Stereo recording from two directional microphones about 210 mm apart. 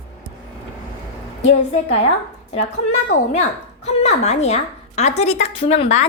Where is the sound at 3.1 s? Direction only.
35° left (ahead or behind).